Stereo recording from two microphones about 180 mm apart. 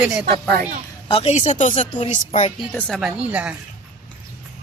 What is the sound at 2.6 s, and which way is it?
Speech, 5° left (ahead or behind).